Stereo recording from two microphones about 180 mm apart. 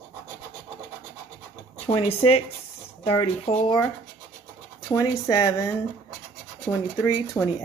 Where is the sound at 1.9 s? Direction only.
35° left (ahead or behind).